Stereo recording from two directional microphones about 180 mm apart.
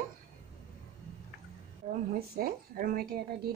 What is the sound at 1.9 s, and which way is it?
A woman's voice, 50° right (ahead or behind).